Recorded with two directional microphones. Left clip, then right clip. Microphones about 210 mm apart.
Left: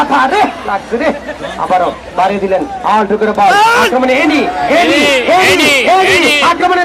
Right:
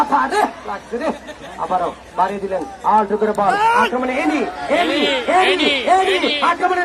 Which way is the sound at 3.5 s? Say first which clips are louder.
Left 6 dB; 40° left (ahead or behind).